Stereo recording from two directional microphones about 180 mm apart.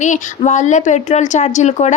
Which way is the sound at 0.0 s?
45° left (ahead or behind).